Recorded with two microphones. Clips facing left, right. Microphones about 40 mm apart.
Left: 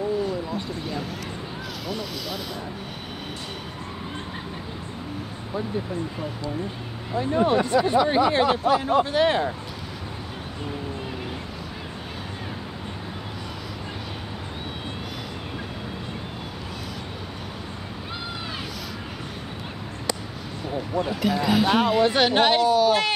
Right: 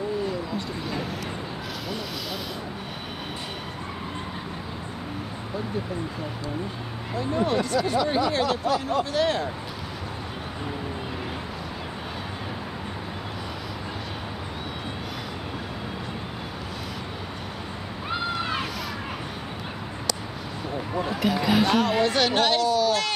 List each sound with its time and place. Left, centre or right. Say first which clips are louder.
7.2 s speech: left 4 dB; left
18.1 s a sound: right 7 dB; centre
21.1 s speech: even; centre
21.6 s speech: left 2 dB; centre